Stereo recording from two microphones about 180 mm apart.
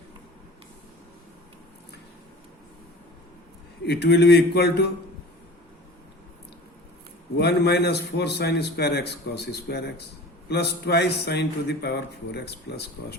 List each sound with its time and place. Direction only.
3.8 s a man's voice: 65° left (ahead or behind)
7.3 s a man's voice: 65° left (ahead or behind)